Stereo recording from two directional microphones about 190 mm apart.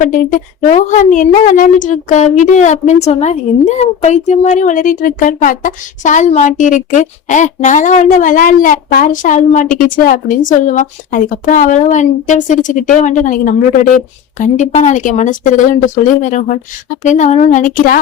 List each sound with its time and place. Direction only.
0.0 s a woman's voice: 45° left (ahead or behind)